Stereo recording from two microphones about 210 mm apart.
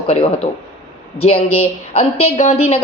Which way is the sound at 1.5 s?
30° left (ahead or behind).